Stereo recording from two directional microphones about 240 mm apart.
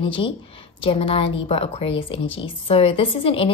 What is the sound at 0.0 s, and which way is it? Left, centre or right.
A woman's voice, left.